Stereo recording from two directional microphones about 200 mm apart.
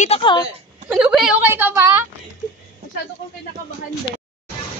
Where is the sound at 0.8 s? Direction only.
5° right (ahead or behind).